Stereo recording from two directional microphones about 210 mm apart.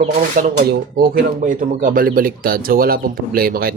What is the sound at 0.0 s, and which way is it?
Speech, 35° right (ahead or behind).